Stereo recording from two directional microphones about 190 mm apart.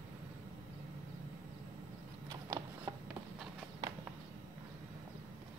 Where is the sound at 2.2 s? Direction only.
15° right (ahead or behind).